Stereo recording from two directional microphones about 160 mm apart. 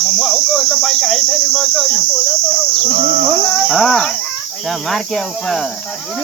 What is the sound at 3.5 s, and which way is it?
Cricket, centre (ahead or behind).